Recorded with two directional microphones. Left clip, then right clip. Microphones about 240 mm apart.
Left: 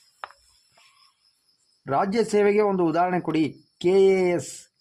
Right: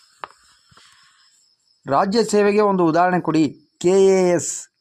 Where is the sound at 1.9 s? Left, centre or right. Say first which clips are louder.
Right 5 dB; right.